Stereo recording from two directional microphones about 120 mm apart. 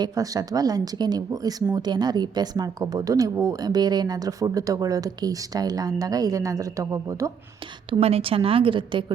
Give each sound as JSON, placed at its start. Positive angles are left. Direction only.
{"t": 0.0, "sound": "speech", "side_deg": -30}
{"t": 7.9, "sound": "a woman's voice", "side_deg": -55}